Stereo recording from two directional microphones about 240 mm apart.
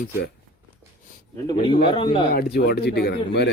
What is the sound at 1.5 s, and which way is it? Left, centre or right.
Speech, left.